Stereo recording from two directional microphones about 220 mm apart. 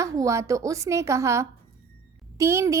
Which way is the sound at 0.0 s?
15° right (ahead or behind).